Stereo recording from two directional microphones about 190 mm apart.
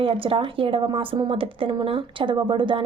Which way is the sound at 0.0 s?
30° right (ahead or behind).